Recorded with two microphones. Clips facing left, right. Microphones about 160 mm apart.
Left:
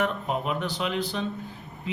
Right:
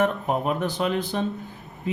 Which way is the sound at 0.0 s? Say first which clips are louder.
Right 4 dB; 45° right (ahead or behind).